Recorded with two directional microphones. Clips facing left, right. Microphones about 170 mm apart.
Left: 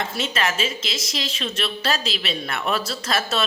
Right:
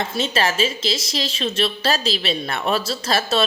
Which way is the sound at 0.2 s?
30° right (ahead or behind).